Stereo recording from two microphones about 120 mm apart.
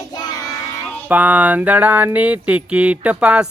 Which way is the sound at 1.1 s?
15° right (ahead or behind).